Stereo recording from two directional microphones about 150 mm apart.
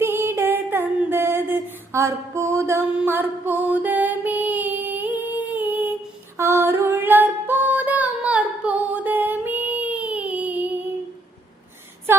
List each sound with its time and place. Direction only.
0.0 s a sound: 15° right (ahead or behind)
3.0 s music: 15° right (ahead or behind)
6.3 s female singing: 15° right (ahead or behind)